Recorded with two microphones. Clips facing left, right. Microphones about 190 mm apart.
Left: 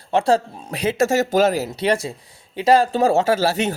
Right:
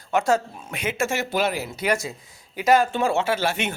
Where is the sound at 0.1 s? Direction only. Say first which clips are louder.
Left 4 dB; 30° left (ahead or behind).